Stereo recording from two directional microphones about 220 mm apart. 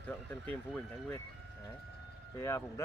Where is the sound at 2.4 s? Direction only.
10° left (ahead or behind).